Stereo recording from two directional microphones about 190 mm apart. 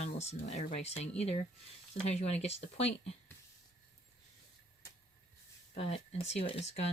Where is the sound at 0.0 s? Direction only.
35° left (ahead or behind).